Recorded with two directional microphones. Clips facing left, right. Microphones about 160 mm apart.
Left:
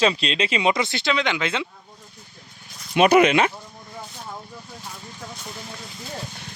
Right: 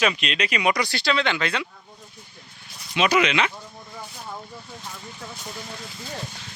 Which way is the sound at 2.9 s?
50° left (ahead or behind).